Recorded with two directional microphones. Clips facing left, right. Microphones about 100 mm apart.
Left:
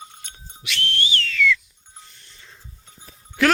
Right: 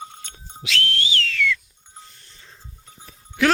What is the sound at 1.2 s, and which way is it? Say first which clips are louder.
Whistle: left 2 dB; 75° right (ahead or behind).